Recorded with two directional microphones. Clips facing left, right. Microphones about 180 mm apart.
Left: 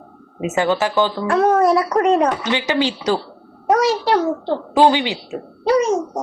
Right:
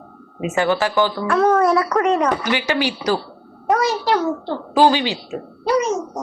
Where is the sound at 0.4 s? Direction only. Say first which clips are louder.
Left 1 dB; 20° left (ahead or behind).